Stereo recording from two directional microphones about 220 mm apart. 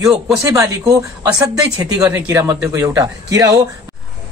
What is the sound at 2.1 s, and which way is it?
A man's voice, 15° right (ahead or behind).